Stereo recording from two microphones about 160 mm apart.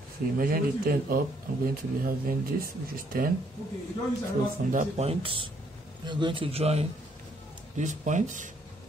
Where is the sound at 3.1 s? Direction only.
60° right (ahead or behind).